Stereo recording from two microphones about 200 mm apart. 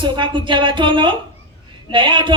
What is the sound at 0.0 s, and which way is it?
A man's voice, 25° right (ahead or behind).